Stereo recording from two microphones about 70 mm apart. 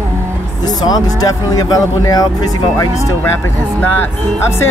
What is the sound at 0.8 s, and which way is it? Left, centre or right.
Speech, left.